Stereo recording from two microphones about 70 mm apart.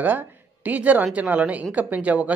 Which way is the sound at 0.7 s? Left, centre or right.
Right.